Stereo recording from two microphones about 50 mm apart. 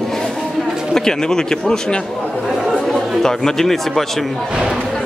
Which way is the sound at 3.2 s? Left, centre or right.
Centre.